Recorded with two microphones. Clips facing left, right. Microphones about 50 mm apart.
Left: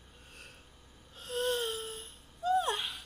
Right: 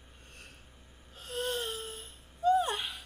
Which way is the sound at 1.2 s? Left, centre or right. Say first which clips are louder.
Left 2 dB; centre.